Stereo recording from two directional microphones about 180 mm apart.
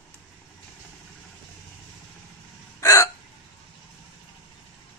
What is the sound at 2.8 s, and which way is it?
Hiccup, 20° left (ahead or behind).